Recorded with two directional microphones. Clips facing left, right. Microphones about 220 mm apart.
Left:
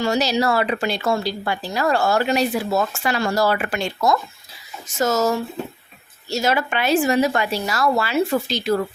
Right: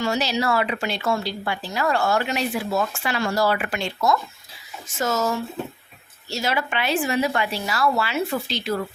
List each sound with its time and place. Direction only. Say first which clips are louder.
0.0 s a woman's voice: left 4 dB; 40° left (ahead or behind)
6.3 s a woman's voice: left 4 dB; 45° left (ahead or behind)